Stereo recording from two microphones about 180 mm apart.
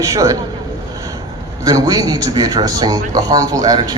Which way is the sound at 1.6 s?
20° right (ahead or behind).